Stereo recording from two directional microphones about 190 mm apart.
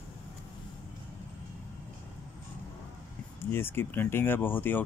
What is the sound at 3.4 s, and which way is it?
Speech, 10° left (ahead or behind).